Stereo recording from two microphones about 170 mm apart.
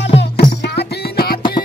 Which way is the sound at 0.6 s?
75° left (ahead or behind).